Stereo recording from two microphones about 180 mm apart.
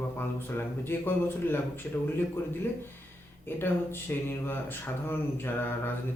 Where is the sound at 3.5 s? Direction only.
10° left (ahead or behind).